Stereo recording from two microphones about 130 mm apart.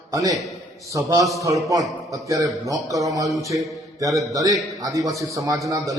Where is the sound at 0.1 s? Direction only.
25° right (ahead or behind).